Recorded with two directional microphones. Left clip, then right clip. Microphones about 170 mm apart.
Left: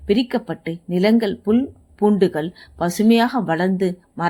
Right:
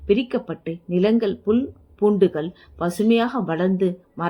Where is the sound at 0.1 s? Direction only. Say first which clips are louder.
Left 1 dB; 30° left (ahead or behind).